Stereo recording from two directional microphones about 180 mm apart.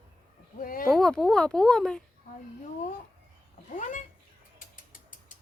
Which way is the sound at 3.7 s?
45° left (ahead or behind).